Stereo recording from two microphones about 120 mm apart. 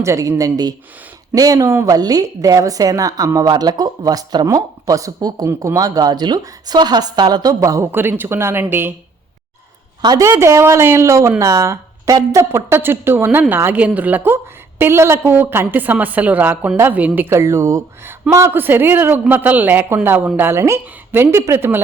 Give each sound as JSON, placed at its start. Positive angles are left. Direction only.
{"t": 0.0, "sound": "a woman's voice", "side_deg": -25}
{"t": 10.0, "sound": "a woman's voice", "side_deg": -30}